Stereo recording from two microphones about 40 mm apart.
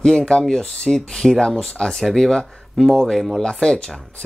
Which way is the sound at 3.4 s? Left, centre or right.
Centre.